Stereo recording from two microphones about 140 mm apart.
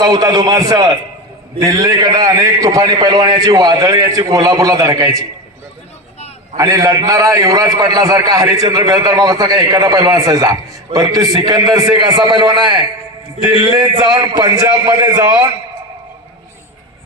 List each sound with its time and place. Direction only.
0.0 s a man's voice: 30° right (ahead or behind)
6.6 s a man's voice: 25° right (ahead or behind)